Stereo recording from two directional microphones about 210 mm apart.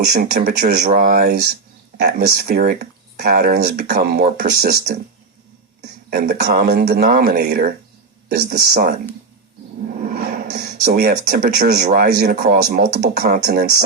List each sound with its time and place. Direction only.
0.1 s speech: 45° right (ahead or behind)